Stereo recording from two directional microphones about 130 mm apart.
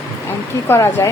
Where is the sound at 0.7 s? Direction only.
20° left (ahead or behind).